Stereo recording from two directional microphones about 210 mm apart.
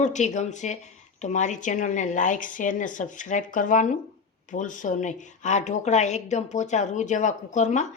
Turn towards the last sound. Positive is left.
turn(degrees=35)  # may be behind; listen again after turning